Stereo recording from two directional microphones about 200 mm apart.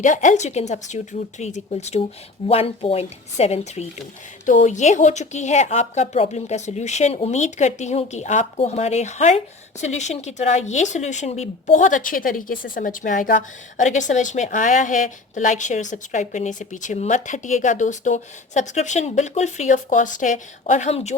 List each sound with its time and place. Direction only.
0.0 s speech: 40° left (ahead or behind)